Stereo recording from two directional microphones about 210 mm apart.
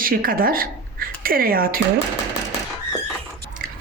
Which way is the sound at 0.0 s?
45° right (ahead or behind).